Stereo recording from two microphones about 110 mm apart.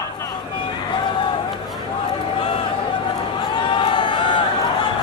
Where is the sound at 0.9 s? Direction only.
50° left (ahead or behind).